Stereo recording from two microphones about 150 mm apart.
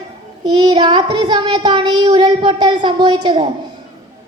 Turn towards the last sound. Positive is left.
turn(degrees=-30)  # may be behind; listen again after turning